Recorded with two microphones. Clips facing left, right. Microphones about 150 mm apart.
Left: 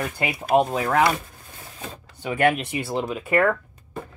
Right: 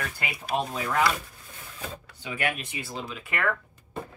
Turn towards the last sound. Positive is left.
turn(degrees=50)  # may be behind; listen again after turning